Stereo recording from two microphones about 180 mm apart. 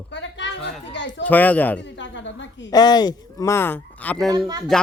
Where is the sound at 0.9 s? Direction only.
85° left.